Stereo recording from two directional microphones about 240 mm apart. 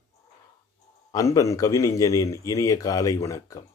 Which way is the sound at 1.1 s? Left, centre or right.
Centre.